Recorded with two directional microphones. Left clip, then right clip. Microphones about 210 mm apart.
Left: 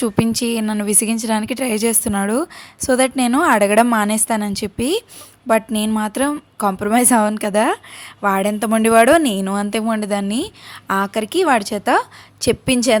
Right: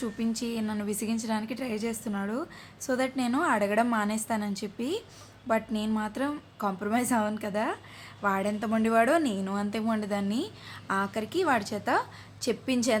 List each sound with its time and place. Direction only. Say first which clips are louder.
0.0 s a woman's voice: left 14 dB; 50° left (ahead or behind)